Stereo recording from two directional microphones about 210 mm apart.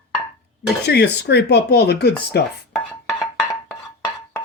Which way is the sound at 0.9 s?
55° left (ahead or behind).